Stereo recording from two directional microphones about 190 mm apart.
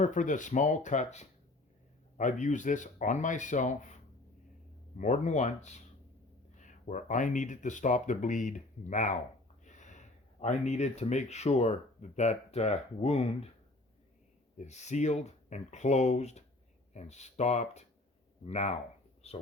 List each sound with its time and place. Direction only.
0.0 s speech: 40° left (ahead or behind)
4.9 s speech: 40° left (ahead or behind)
14.6 s speech: 35° left (ahead or behind)